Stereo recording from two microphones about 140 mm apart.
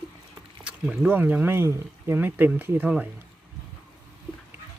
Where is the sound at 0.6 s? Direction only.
5° right (ahead or behind).